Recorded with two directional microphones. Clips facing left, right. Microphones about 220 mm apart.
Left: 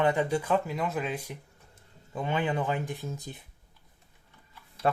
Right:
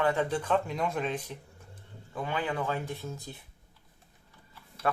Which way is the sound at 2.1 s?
20° left (ahead or behind).